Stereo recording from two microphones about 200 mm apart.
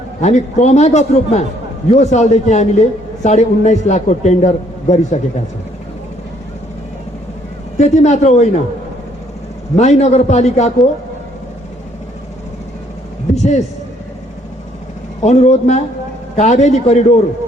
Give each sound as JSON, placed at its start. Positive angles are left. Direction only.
{"t": 0.2, "sound": "a man's voice", "side_deg": 35}
{"t": 7.8, "sound": "a man's voice", "side_deg": 35}
{"t": 9.7, "sound": "a man's voice", "side_deg": 35}
{"t": 13.3, "sound": "a man's voice", "side_deg": 35}
{"t": 15.2, "sound": "a man's voice", "side_deg": 35}